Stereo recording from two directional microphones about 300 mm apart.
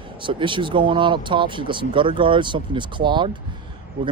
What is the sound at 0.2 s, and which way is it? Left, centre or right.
Speech, centre.